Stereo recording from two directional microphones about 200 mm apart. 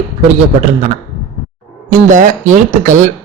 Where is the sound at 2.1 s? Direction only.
40° right (ahead or behind).